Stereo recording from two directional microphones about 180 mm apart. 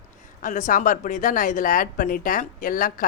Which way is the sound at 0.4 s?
45° left (ahead or behind).